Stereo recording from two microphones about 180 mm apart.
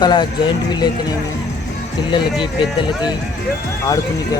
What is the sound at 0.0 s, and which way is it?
Speech, 25° left (ahead or behind).